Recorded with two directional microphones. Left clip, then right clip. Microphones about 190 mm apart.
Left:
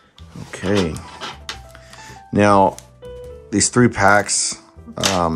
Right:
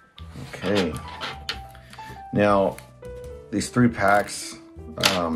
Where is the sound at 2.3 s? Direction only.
35° left (ahead or behind).